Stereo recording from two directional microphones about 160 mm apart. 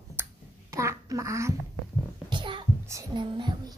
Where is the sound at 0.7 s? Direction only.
20° right (ahead or behind).